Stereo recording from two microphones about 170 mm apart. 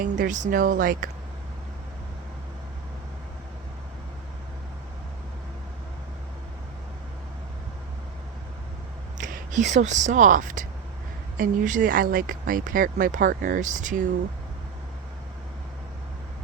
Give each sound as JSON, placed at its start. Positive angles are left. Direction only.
{"t": 0.0, "sound": "speech", "side_deg": -50}
{"t": 9.1, "sound": "speech", "side_deg": -50}